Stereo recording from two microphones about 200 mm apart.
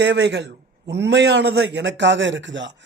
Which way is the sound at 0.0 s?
55° right (ahead or behind).